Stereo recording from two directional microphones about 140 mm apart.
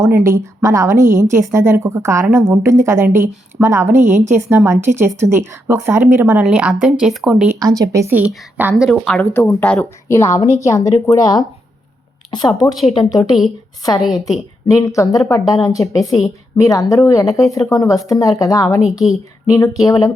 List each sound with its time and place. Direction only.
0.0 s a woman's voice: 20° right (ahead or behind)
6.4 s speech: 5° right (ahead or behind)
7.6 s a woman's voice: 25° right (ahead or behind)
8.7 s speech: centre (ahead or behind)
9.3 s speech: 15° left (ahead or behind)
14.0 s speech: centre (ahead or behind)
14.7 s speech: 25° left (ahead or behind)